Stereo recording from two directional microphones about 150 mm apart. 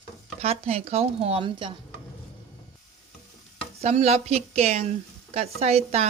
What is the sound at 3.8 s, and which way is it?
A woman's voice, 45° right (ahead or behind).